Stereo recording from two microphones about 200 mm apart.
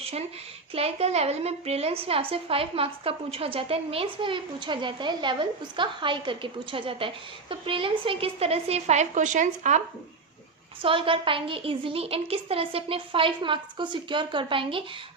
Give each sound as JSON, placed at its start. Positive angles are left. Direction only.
{"t": 0.0, "sound": "a sound", "side_deg": -30}
{"t": 0.7, "sound": "a woman's voice", "side_deg": -30}
{"t": 10.8, "sound": "a woman's voice", "side_deg": -25}